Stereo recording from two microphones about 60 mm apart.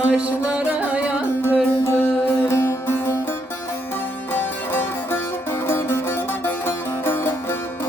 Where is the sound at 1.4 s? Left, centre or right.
Left.